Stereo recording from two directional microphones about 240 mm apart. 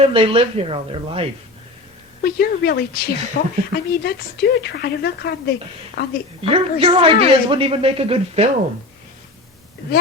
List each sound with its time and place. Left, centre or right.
0.0 s a man's voice: right
2.2 s a woman's voice: left
6.5 s a man's voice: right